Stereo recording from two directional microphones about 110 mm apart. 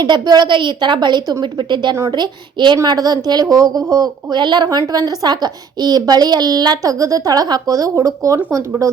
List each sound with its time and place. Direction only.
0.0 s a woman's voice: 40° right (ahead or behind)